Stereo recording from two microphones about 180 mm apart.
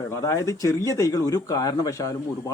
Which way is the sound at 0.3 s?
15° left (ahead or behind).